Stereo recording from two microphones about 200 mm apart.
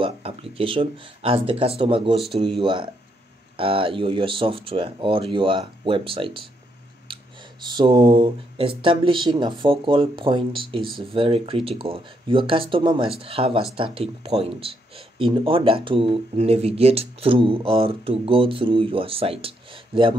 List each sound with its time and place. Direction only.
0.0 s speech: 30° right (ahead or behind)
7.1 s whispering: 25° right (ahead or behind)
7.6 s speech: 25° right (ahead or behind)